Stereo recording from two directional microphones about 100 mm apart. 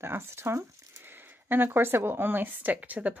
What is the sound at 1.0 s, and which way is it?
Speech, 20° right (ahead or behind).